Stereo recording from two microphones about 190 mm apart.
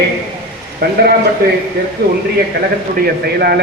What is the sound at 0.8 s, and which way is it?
Speech, 55° right (ahead or behind).